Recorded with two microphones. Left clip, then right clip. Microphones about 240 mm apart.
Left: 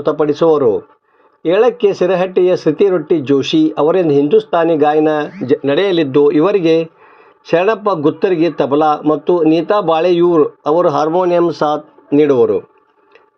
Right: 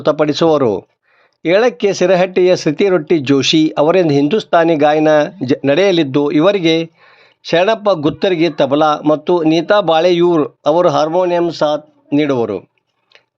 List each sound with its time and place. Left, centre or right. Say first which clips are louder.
0.0 s speech: even; right